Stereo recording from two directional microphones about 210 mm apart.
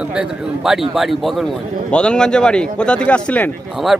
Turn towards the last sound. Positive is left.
turn(degrees=5)  # may be behind; listen again after turning